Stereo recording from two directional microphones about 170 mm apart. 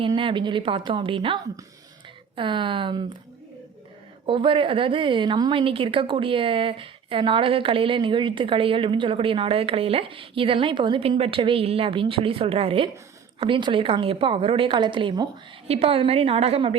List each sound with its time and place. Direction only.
0.0 s a woman's voice: 30° right (ahead or behind)
4.3 s a woman's voice: 30° right (ahead or behind)